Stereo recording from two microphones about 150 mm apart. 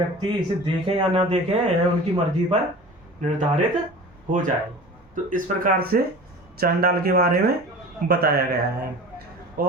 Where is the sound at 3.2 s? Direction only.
55° right (ahead or behind); by 8.9 s 90° right.